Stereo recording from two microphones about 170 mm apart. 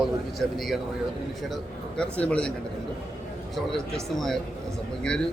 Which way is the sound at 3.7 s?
5° left (ahead or behind).